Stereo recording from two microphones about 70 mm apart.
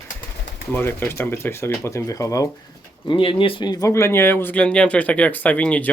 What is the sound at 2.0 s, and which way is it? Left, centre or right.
Speech, left.